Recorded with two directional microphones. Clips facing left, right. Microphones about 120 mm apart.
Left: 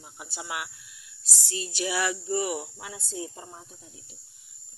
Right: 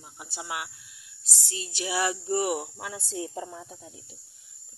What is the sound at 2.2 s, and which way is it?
Speech, 55° right (ahead or behind).